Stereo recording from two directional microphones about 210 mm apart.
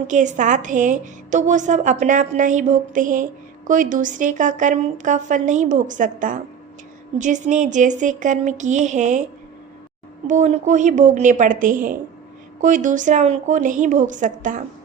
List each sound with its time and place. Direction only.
0.1 s a woman's voice: 35° right (ahead or behind)
10.2 s a woman's voice: 35° right (ahead or behind)